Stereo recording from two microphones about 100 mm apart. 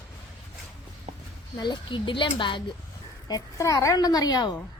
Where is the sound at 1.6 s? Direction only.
50° left (ahead or behind).